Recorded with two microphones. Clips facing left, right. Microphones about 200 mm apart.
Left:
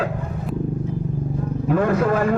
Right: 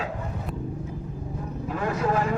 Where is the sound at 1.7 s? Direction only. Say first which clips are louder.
Left 7 dB; 60° left (ahead or behind).